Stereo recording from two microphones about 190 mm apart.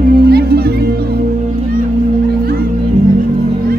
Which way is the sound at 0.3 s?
55° right (ahead or behind).